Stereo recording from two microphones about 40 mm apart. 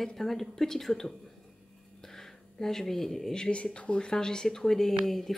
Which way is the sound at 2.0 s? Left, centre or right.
Centre.